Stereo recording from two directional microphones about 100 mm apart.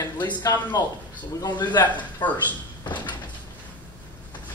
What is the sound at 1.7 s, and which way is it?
Speech, 15° left (ahead or behind).